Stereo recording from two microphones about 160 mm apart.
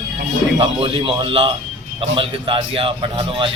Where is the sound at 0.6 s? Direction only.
30° right (ahead or behind).